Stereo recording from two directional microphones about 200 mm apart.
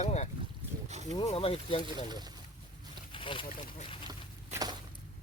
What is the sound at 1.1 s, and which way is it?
Speech, 25° left (ahead or behind).